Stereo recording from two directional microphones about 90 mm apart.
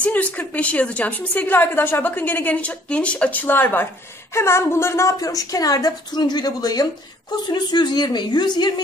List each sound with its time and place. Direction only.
0.0 s a woman's voice: 15° left (ahead or behind); by 8.8 s 50° left (ahead or behind)